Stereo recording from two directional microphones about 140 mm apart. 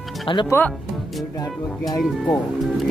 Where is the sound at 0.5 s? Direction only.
15° left (ahead or behind).